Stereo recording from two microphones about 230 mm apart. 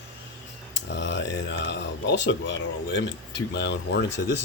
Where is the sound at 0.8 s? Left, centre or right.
Left.